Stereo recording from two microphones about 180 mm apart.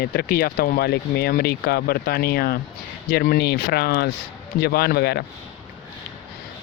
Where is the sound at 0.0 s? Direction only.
60° left (ahead or behind).